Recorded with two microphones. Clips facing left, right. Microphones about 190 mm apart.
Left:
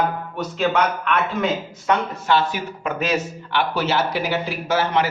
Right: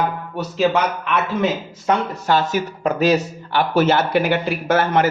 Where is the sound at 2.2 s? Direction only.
40° right (ahead or behind).